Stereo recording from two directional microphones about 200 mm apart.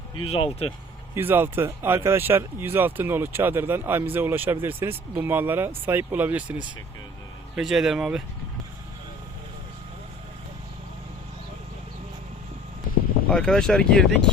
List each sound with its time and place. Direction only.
0.3 s speech: 30° left (ahead or behind)
1.1 s speech: 10° right (ahead or behind)
13.3 s speech: 5° left (ahead or behind)